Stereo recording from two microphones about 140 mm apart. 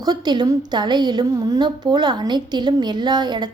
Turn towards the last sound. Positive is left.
turn(degrees=-30)  # may be behind; listen again after turning